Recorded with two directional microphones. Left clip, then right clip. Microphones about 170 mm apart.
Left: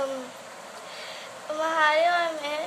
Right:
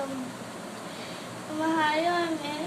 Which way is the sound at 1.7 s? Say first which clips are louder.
Left 5 dB; 60° left (ahead or behind).